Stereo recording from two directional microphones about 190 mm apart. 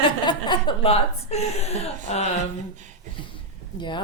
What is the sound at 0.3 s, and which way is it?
A woman's voice, 25° left (ahead or behind).